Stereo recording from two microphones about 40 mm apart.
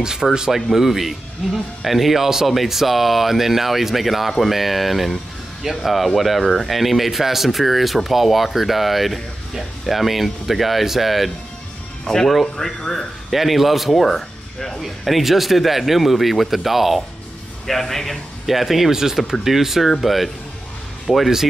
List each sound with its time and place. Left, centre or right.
0.0 s speech: centre
0.5 s speech: centre
6.4 s speech: centre
6.7 s speech: centre
12.0 s speech: centre
13.3 s speech: centre
17.6 s speech: centre
18.5 s speech: centre